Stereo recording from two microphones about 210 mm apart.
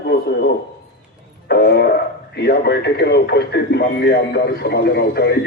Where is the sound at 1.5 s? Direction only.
50° left (ahead or behind).